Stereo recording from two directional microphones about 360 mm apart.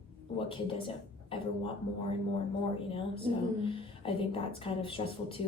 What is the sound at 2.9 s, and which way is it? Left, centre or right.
A woman's voice, centre.